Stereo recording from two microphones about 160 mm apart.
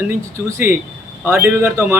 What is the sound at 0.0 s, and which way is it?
Speech, 15° right (ahead or behind).